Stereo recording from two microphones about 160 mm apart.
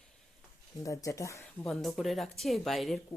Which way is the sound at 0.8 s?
20° left (ahead or behind).